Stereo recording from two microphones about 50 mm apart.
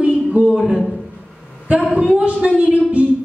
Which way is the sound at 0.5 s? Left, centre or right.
Centre.